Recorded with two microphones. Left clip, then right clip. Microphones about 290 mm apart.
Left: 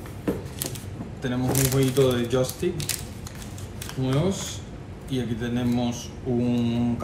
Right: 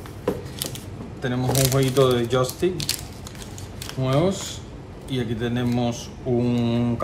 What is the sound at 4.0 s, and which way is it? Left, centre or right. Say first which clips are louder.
A man's voice: right 4 dB; right.